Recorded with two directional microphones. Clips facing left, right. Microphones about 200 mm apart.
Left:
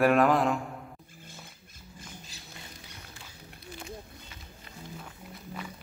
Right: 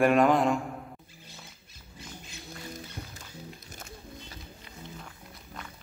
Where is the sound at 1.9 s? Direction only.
35° left (ahead or behind).